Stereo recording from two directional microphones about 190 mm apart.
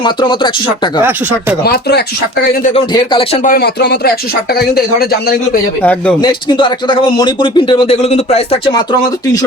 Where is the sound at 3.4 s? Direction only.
55° left (ahead or behind).